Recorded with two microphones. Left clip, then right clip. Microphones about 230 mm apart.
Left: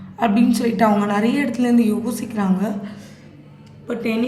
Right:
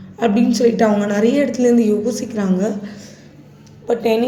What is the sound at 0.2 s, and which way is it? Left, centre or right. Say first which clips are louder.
A woman's voice: right 3 dB; centre.